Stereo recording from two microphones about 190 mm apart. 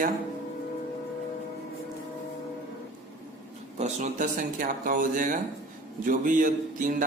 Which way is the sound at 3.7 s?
35° right (ahead or behind).